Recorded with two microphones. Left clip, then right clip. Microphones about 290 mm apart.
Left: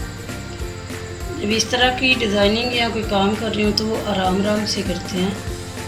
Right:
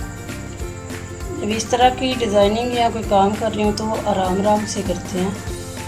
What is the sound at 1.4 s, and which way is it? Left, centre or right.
A woman's voice, right.